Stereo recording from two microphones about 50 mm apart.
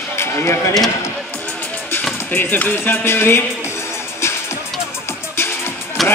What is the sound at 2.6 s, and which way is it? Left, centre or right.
Music, left.